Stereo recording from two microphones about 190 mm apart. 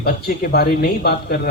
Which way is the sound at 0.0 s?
55° left (ahead or behind).